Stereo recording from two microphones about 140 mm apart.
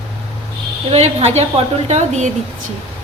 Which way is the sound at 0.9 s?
45° right (ahead or behind).